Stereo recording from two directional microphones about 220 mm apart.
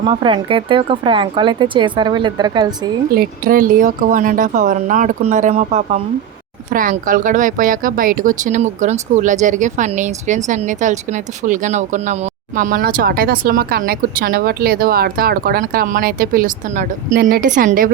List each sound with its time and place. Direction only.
0.0 s speech: 20° right (ahead or behind)
3.2 s speech: 40° right (ahead or behind)